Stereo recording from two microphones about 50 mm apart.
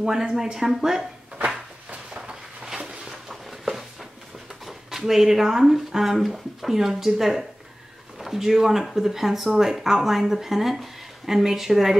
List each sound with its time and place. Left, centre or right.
0.0 s speech: centre
2.0 s a sound: centre
4.6 s speech: centre